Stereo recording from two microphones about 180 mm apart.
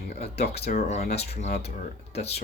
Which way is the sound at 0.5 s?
65° left (ahead or behind).